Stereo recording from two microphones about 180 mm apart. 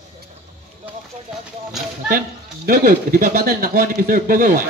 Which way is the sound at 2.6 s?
55° right (ahead or behind).